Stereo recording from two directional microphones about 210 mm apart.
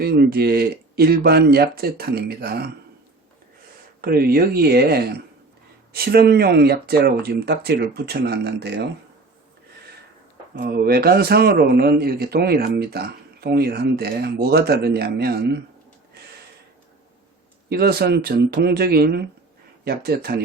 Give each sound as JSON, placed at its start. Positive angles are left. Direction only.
{"t": 0.0, "sound": "a man's voice", "side_deg": -50}
{"t": 4.0, "sound": "a man's voice", "side_deg": -45}
{"t": 10.6, "sound": "a man's voice", "side_deg": -50}
{"t": 17.7, "sound": "a man's voice", "side_deg": -50}